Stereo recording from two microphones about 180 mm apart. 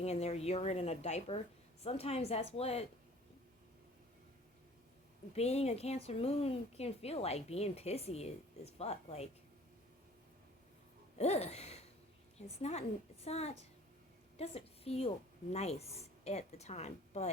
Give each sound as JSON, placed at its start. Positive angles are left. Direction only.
{"t": 0.0, "sound": "a woman's voice", "side_deg": 35}
{"t": 5.3, "sound": "a woman's voice", "side_deg": 35}
{"t": 11.2, "sound": "a sound", "side_deg": 35}
{"t": 12.4, "sound": "a woman's voice", "side_deg": 35}